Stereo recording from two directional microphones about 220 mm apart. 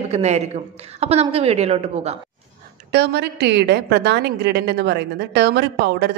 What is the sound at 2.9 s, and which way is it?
A woman's voice, 50° right (ahead or behind).